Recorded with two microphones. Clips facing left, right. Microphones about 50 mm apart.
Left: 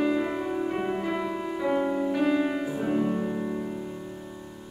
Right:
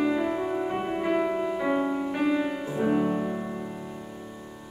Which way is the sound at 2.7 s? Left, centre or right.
Centre.